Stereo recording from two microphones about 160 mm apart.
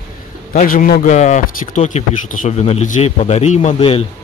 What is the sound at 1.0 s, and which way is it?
Speech, 50° left (ahead or behind).